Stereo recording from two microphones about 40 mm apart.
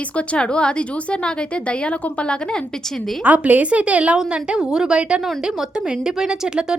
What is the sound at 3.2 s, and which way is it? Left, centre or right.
Speech, right.